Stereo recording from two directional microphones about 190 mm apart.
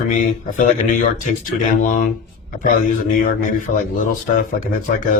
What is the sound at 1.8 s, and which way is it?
Speech, 45° left (ahead or behind).